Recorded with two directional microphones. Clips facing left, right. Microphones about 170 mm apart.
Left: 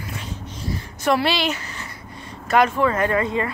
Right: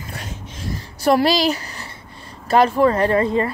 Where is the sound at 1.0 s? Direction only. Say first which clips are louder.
Right 4 dB; 40° right (ahead or behind).